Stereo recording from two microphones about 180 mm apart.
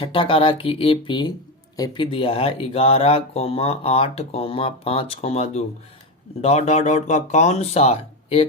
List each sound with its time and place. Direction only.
0.0 s speech: 30° left (ahead or behind)